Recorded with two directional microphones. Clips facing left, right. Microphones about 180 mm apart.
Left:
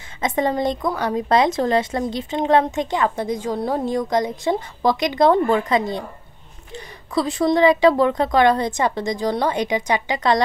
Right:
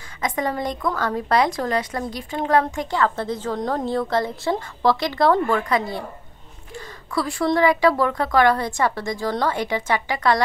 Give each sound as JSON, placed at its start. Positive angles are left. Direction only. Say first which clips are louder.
{"t": 0.2, "sound": "a woman's voice", "louder": "left 4 dB", "side_deg": 25}